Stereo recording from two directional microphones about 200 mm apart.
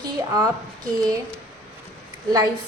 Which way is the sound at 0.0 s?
15° right (ahead or behind).